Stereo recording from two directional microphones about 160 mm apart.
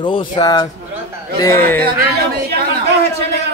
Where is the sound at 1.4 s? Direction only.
15° left (ahead or behind).